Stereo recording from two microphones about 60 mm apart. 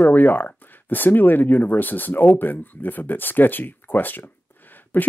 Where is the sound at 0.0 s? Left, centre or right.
Left.